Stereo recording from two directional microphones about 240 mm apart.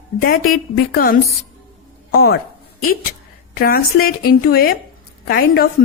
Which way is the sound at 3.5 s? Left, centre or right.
Left.